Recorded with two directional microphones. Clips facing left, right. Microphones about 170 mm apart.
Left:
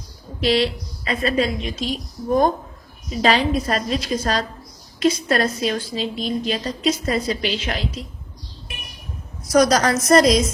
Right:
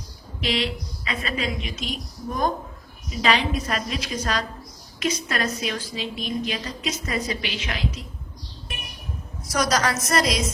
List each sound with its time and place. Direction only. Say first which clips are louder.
0.4 s a woman's voice: left 7 dB; 35° left (ahead or behind)
9.5 s a woman's voice: left 7 dB; 40° left (ahead or behind)